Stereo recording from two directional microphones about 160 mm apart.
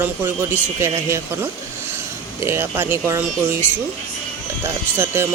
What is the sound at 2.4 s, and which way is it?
Speech, 15° right (ahead or behind).